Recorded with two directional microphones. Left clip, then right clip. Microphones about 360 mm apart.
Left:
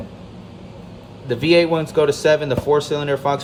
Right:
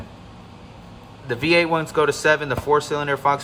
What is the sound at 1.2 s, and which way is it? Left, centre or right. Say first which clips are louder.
Speech: left 3 dB; centre.